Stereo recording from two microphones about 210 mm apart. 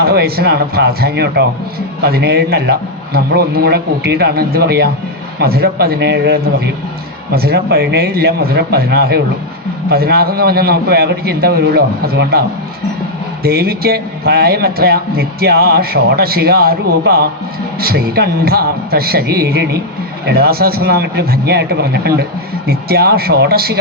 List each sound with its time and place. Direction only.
0.0 s a man's voice: 50° right (ahead or behind)